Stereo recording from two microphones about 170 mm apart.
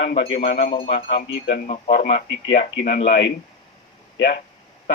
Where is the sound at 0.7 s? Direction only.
35° left (ahead or behind).